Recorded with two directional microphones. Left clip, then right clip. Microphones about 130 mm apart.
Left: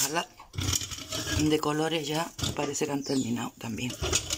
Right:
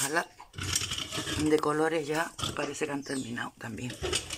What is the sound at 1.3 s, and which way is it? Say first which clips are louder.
Speech: even; 5° left (ahead or behind).